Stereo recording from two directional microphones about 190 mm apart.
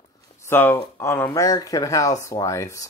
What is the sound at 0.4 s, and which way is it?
Speech, 10° left (ahead or behind).